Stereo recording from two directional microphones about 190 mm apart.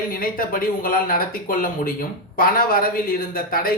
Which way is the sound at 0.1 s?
50° left (ahead or behind).